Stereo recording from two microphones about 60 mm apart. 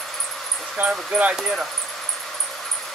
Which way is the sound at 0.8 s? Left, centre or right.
Right.